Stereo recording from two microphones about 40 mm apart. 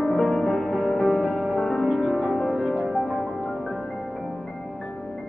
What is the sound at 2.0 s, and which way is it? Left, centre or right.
Music, centre.